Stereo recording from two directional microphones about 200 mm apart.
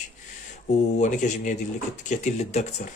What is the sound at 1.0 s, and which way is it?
Speech, 40° left (ahead or behind).